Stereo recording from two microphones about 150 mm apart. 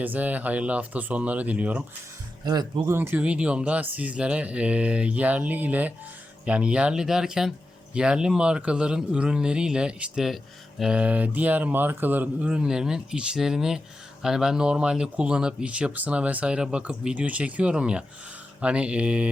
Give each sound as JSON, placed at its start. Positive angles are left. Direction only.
{"t": 0.0, "sound": "a man's voice", "side_deg": -10}
{"t": 2.4, "sound": "speech", "side_deg": -25}
{"t": 2.9, "sound": "a man's voice", "side_deg": -15}